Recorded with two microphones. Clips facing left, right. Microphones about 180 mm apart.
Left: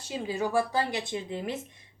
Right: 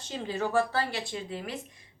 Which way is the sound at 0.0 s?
10° left (ahead or behind).